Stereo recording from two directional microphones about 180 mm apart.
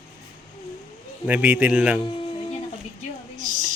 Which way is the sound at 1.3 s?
10° right (ahead or behind).